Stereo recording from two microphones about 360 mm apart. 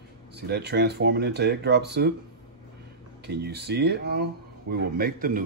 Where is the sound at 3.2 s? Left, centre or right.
Right.